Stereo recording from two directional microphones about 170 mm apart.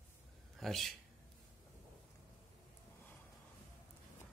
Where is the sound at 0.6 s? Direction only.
Centre (ahead or behind).